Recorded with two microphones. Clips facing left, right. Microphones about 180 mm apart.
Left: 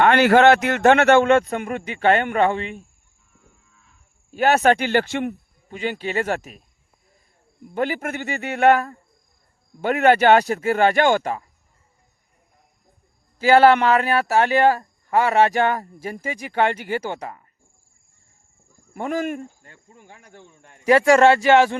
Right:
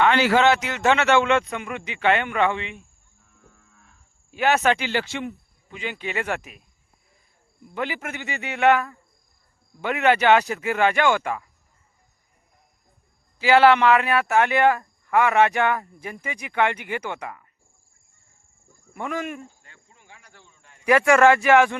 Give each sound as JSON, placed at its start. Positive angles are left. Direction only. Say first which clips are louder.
{"t": 0.0, "sound": "a man's voice", "louder": "left 4 dB", "side_deg": 55}
{"t": 4.4, "sound": "speech", "louder": "left 3 dB", "side_deg": 40}
{"t": 4.6, "sound": "a man's voice", "louder": "left 5 dB", "side_deg": 50}
{"t": 5.6, "sound": "speech", "louder": "left 5 dB", "side_deg": 40}
{"t": 7.7, "sound": "speech", "louder": "left 5 dB", "side_deg": 45}
{"t": 13.4, "sound": "speech", "louder": "left 2 dB", "side_deg": 45}
{"t": 18.9, "sound": "speech", "louder": "left 5 dB", "side_deg": 40}
{"t": 20.4, "sound": "a sound", "louder": "left 7 dB", "side_deg": 55}
{"t": 20.8, "sound": "speech", "louder": "left 2 dB", "side_deg": 30}